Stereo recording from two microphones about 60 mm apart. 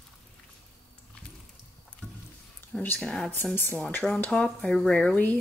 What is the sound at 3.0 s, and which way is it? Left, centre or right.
Speech, centre.